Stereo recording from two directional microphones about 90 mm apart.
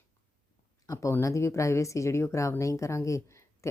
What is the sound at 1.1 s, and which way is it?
Speech, 30° left (ahead or behind).